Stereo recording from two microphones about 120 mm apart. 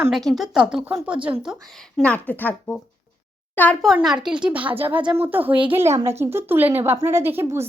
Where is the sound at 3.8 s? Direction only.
Centre (ahead or behind).